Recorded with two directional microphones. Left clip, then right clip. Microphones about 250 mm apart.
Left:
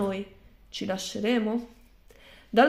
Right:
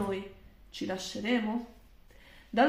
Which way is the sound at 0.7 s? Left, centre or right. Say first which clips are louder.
Left 4 dB; left.